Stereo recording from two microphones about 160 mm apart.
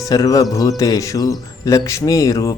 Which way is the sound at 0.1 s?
20° left (ahead or behind).